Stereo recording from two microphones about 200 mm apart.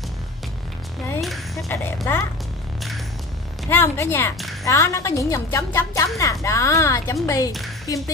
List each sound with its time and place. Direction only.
1.2 s a sound: centre (ahead or behind)
1.7 s a woman's voice: 10° left (ahead or behind)
3.6 s a woman's voice: 10° left (ahead or behind)